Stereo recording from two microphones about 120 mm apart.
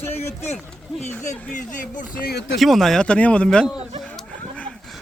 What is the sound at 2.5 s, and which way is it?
A man's voice, centre (ahead or behind).